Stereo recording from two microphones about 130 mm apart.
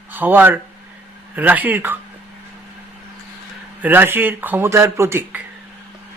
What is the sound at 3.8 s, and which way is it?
Speech, 15° right (ahead or behind).